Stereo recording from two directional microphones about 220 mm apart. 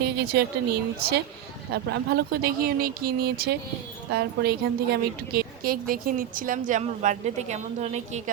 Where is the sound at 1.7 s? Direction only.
45° right (ahead or behind).